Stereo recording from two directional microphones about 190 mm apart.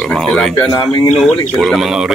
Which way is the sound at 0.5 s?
15° left (ahead or behind).